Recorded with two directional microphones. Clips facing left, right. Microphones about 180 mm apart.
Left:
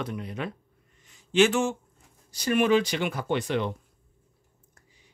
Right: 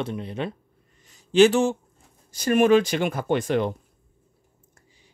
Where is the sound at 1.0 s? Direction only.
35° right (ahead or behind).